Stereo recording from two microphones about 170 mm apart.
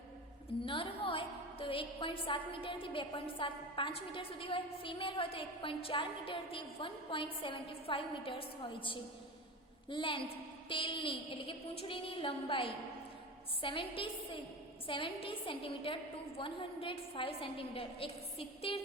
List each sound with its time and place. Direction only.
0.6 s a woman's voice: 30° left (ahead or behind)